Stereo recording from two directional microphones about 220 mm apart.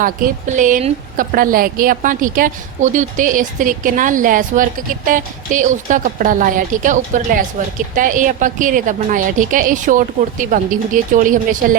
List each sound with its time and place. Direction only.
0.0 s a woman's voice: 35° right (ahead or behind)